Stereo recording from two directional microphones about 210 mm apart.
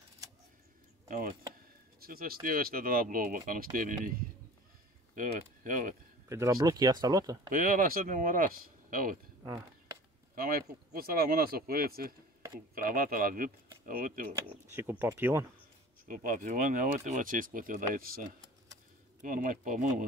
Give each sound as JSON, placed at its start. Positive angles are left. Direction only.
{"t": 1.0, "sound": "a sound", "side_deg": -40}
{"t": 2.0, "sound": "speech", "side_deg": -45}
{"t": 5.1, "sound": "speech", "side_deg": -40}
{"t": 6.2, "sound": "speech", "side_deg": -15}
{"t": 7.4, "sound": "speech", "side_deg": -40}
{"t": 9.4, "sound": "a sound", "side_deg": -15}
{"t": 10.3, "sound": "speech", "side_deg": -45}
{"t": 14.7, "sound": "speech", "side_deg": -10}
{"t": 16.1, "sound": "speech", "side_deg": -40}
{"t": 19.2, "sound": "speech", "side_deg": -40}